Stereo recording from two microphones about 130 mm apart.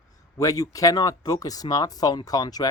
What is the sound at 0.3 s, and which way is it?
Speech, 25° left (ahead or behind).